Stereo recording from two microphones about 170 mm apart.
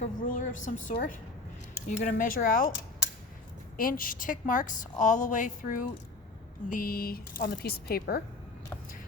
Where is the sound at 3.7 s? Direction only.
55° left (ahead or behind).